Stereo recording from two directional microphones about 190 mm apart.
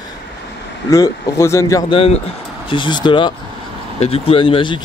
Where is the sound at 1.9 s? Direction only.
30° left (ahead or behind).